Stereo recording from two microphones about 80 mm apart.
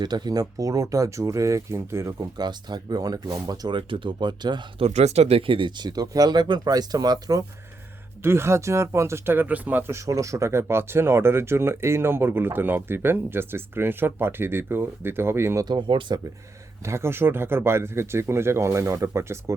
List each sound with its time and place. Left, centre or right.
0.0 s speech: right
2.1 s speech: right
3.8 s speech: right
5.5 s speech: right
8.2 s speech: right
9.9 s speech: right
15.6 s speech: right
16.8 s speech: right